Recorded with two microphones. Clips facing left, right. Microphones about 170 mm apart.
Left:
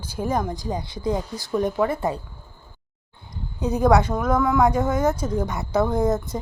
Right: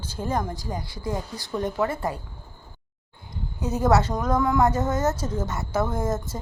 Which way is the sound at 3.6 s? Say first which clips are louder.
Left 3 dB; 15° left (ahead or behind).